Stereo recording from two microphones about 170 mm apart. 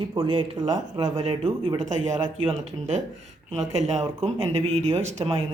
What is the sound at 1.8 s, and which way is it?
A man's voice, 45° right (ahead or behind).